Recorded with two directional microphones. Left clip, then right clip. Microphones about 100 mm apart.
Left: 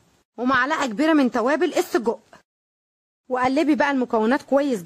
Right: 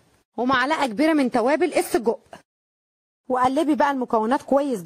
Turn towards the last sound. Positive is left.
turn(degrees=-35)  # may be behind; listen again after turning